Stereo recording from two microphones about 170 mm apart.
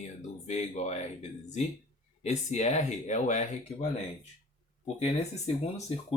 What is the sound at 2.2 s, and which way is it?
Speech, 40° left (ahead or behind).